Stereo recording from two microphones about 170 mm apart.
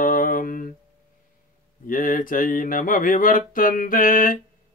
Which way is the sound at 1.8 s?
55° left (ahead or behind).